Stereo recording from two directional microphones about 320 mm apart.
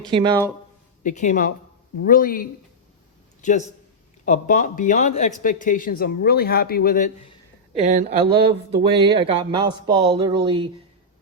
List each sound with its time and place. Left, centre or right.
0.1 s speech: centre
1.0 s a man's voice: left
4.3 s a man's voice: left
7.7 s speech: right